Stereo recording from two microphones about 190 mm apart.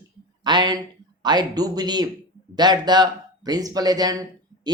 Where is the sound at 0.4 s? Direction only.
25° right (ahead or behind).